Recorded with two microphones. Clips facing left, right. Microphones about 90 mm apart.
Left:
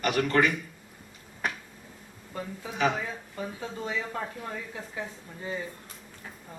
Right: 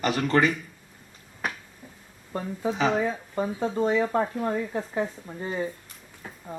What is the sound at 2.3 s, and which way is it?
A man's voice, 35° right (ahead or behind).